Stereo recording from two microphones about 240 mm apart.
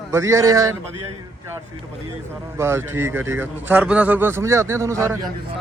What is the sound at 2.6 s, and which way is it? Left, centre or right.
A man's voice, centre.